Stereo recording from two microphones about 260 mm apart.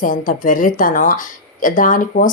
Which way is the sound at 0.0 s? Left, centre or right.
Left.